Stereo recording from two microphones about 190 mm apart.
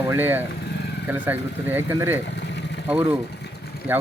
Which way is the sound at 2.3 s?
65° left (ahead or behind).